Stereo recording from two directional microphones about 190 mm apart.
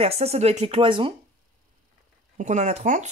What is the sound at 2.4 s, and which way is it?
Speech, 40° right (ahead or behind).